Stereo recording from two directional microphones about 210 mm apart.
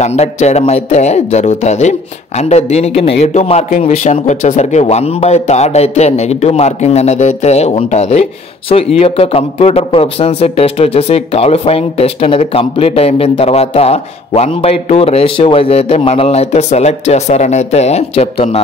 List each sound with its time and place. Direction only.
0.0 s speech: 30° left (ahead or behind)